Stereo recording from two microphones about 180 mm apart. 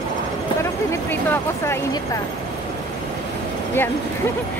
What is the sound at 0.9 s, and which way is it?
Speech, 10° left (ahead or behind).